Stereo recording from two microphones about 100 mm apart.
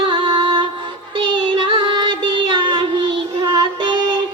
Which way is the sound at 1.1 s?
55° right (ahead or behind).